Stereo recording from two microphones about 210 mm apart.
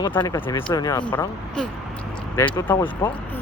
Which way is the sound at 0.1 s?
15° left (ahead or behind).